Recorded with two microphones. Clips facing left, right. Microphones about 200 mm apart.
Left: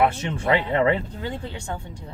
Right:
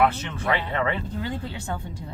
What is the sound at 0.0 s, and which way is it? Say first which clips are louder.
Speech: left 1 dB; 20° left (ahead or behind).